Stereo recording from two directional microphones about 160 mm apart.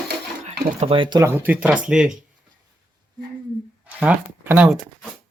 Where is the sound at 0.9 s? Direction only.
30° right (ahead or behind).